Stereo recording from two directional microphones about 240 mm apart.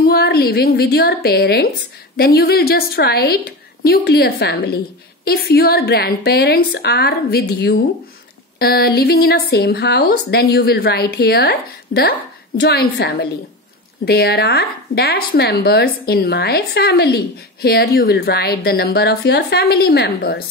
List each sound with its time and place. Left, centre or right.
0.0 s a woman's voice: left